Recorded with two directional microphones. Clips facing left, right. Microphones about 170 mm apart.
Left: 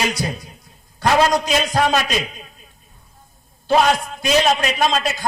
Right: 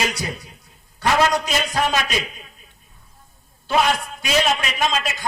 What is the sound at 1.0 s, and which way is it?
Speech, 40° left (ahead or behind).